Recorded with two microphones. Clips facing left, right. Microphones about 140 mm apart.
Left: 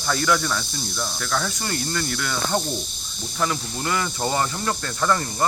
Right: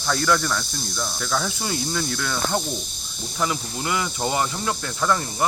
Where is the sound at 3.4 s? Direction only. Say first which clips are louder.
Even; 15° right (ahead or behind).